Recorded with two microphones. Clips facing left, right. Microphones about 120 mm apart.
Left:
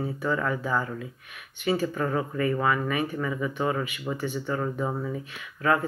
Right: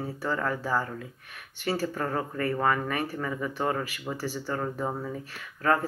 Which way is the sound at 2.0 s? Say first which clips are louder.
Left 3 dB; 10° left (ahead or behind).